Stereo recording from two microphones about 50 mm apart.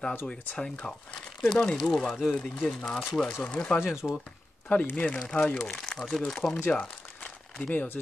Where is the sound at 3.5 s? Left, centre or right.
Left.